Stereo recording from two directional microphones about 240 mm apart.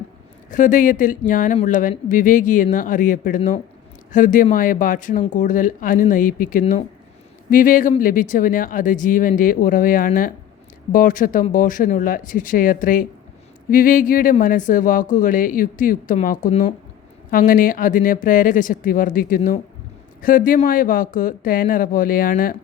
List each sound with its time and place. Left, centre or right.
0.5 s speech: left